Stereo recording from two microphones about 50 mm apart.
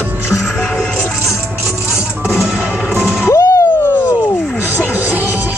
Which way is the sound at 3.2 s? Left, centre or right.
Left.